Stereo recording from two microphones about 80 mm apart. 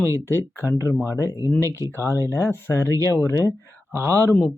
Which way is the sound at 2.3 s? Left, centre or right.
Left.